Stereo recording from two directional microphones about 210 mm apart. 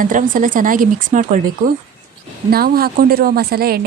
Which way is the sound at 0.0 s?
40° right (ahead or behind).